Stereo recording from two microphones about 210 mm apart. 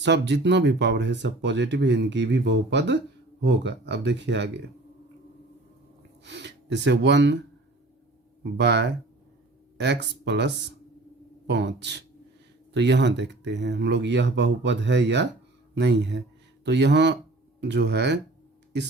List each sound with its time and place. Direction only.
0.0 s speech: 55° right (ahead or behind)
6.2 s speech: 55° right (ahead or behind)
8.4 s speech: 55° right (ahead or behind)